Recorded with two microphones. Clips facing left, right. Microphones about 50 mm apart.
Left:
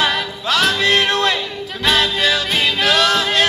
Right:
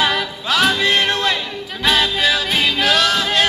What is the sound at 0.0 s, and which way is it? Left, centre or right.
Music, centre.